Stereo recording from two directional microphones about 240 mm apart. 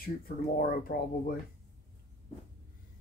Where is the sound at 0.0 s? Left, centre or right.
Left.